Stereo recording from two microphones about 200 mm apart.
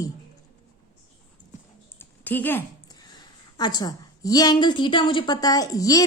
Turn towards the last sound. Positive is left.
turn(degrees=20)  # may be behind; listen again after turning